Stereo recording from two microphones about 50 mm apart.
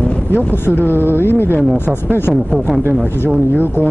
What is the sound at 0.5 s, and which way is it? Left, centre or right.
Speech, left.